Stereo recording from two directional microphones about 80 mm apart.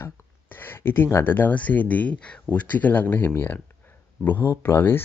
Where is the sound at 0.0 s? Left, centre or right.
Left.